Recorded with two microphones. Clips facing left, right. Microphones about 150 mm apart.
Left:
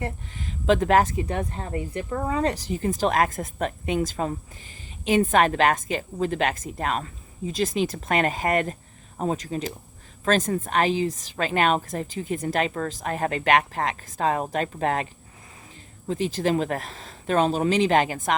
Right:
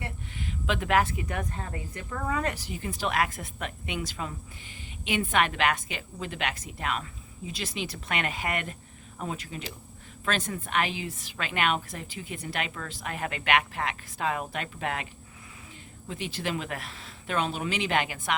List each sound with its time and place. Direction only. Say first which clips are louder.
0.0 s speech: left 5 dB; 40° left (ahead or behind)
16.0 s speech: left 9 dB; 40° left (ahead or behind)